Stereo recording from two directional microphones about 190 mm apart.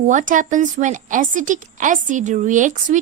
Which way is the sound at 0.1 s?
40° right (ahead or behind).